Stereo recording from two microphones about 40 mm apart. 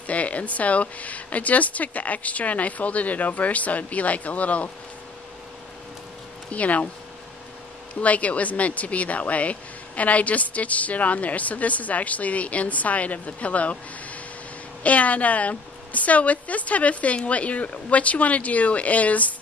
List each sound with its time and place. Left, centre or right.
0.0 s speech: left
6.5 s speech: left
8.0 s speech: left